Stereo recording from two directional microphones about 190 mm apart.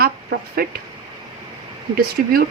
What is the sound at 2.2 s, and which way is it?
Speech, 45° right (ahead or behind).